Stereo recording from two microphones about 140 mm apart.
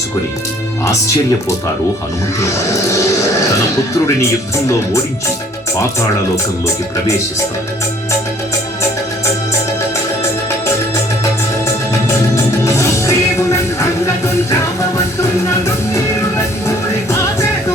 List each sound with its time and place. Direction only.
2.9 s speech: 20° left (ahead or behind)
11.2 s music: 20° left (ahead or behind)
15.2 s speech: 20° left (ahead or behind)